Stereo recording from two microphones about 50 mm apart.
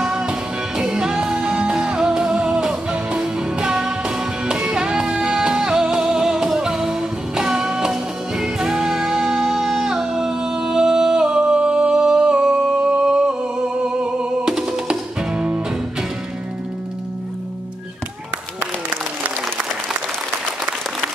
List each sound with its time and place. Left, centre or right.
0.0 s music: centre
14.4 s music: centre
18.6 s applause: right